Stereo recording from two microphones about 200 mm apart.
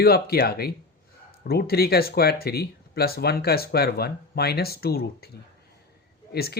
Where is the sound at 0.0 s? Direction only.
50° left (ahead or behind).